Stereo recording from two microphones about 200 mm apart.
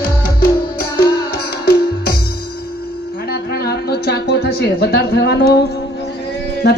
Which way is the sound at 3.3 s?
50° left (ahead or behind).